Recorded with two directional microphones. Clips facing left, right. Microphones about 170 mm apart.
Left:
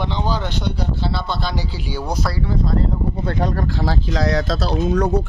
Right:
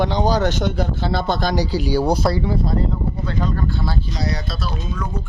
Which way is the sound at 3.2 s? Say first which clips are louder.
Left 2 dB; 60° left (ahead or behind).